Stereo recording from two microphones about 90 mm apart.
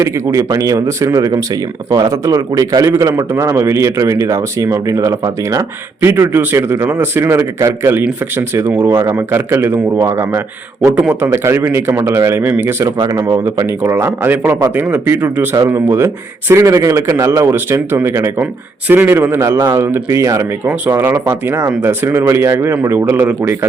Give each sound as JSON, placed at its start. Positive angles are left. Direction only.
{"t": 0.0, "sound": "a man's voice", "side_deg": -35}
{"t": 6.0, "sound": "a man's voice", "side_deg": -30}
{"t": 13.1, "sound": "a man's voice", "side_deg": -40}
{"t": 13.7, "sound": "a man's voice", "side_deg": -25}
{"t": 20.7, "sound": "a man's voice", "side_deg": -20}